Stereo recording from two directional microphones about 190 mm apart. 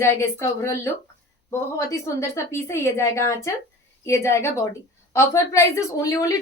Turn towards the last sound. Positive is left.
turn(degrees=15)  # may be behind; listen again after turning